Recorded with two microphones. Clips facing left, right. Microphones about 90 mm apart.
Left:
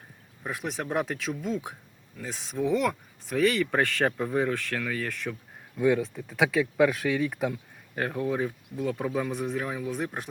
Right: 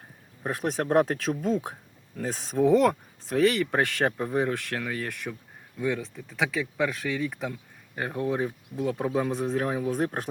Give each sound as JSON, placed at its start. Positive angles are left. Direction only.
{"t": 0.4, "sound": "speech", "side_deg": -40}
{"t": 5.8, "sound": "speech", "side_deg": 10}
{"t": 7.9, "sound": "speech", "side_deg": -10}